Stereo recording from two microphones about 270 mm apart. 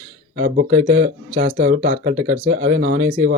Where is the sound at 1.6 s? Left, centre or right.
Right.